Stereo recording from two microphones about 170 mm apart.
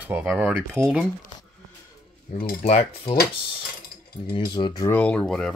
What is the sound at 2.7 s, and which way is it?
Cutlery, 35° left (ahead or behind).